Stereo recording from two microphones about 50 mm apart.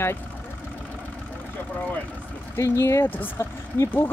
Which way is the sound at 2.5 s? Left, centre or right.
Left.